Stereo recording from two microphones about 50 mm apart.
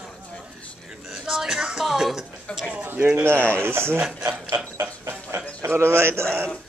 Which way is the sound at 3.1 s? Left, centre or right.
Right.